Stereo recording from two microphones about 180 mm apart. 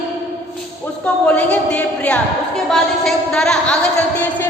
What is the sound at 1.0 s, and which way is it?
Speech, 5° left (ahead or behind).